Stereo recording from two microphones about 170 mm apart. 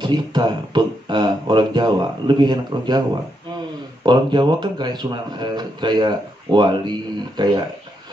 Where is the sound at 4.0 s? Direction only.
25° right (ahead or behind).